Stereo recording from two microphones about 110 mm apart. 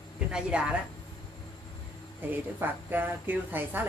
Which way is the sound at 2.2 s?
15° right (ahead or behind).